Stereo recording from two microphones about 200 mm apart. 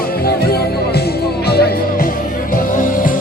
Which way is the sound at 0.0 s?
50° left (ahead or behind).